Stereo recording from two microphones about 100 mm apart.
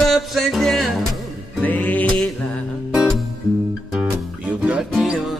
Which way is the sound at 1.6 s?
15° left (ahead or behind).